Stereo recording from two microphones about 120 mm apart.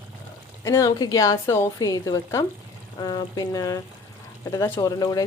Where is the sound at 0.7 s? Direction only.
30° left (ahead or behind).